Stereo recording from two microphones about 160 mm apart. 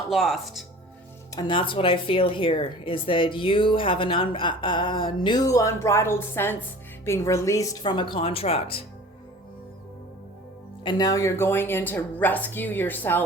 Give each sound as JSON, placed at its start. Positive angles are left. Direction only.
{"t": 0.1, "sound": "speech", "side_deg": 0}
{"t": 1.4, "sound": "a woman's voice", "side_deg": 30}
{"t": 10.8, "sound": "a woman's voice", "side_deg": 25}